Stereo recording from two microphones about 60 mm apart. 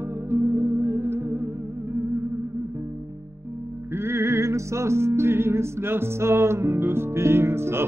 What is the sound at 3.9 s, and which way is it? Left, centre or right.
Music, right.